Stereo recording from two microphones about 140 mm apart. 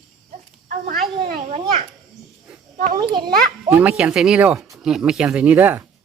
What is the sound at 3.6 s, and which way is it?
Speech, 10° right (ahead or behind).